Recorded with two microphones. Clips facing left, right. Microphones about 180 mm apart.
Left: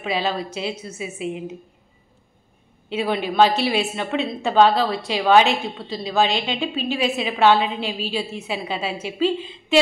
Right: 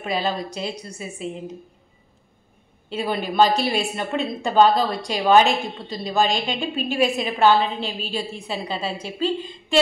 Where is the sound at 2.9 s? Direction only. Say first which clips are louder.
Left 2 dB; 5° left (ahead or behind).